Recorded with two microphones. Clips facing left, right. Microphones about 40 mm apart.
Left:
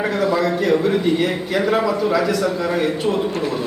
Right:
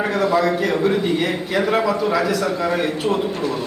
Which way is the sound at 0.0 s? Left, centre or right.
Centre.